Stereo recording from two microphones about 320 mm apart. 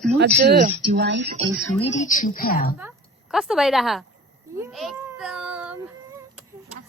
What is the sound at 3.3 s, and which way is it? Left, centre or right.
Speech, centre.